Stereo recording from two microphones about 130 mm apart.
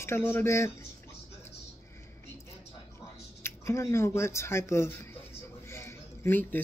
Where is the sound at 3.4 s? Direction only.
20° left (ahead or behind).